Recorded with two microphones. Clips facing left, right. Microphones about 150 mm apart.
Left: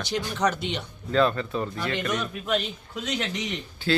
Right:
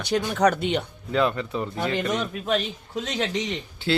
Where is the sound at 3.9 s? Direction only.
20° right (ahead or behind).